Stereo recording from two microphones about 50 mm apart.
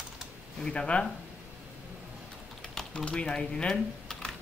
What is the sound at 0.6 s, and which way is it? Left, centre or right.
Speech, centre.